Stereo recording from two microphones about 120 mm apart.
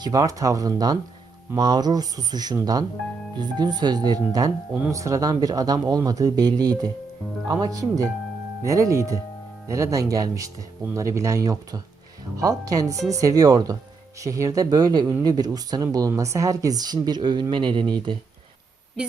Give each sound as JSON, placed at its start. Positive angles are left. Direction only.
{"t": 0.0, "sound": "speech", "side_deg": -30}